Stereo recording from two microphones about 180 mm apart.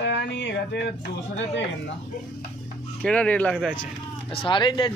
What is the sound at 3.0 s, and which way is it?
Speech, 5° left (ahead or behind).